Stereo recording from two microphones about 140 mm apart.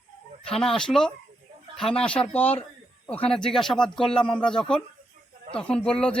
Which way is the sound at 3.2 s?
5° left (ahead or behind).